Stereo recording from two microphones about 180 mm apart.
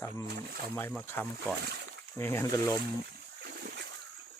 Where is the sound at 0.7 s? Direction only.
10° left (ahead or behind).